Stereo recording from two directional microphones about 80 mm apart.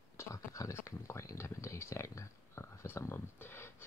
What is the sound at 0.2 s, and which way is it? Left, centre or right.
Speech, left.